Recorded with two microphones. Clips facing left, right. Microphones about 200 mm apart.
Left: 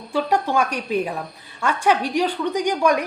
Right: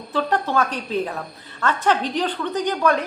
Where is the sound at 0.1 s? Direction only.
10° left (ahead or behind).